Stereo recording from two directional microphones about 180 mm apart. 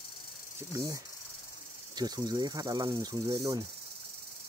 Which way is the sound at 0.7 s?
20° right (ahead or behind).